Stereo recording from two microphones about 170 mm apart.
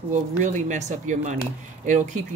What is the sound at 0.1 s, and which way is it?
Speech, 45° right (ahead or behind).